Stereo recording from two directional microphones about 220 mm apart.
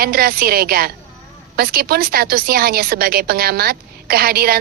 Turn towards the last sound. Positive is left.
turn(degrees=-45)  # may be behind; listen again after turning